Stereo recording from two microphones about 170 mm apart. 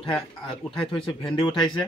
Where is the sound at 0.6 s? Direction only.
5° left (ahead or behind).